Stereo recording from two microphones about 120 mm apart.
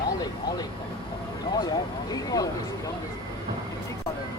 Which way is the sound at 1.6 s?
35° left (ahead or behind).